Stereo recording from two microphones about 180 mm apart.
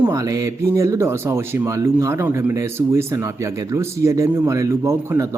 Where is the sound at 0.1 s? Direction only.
20° right (ahead or behind).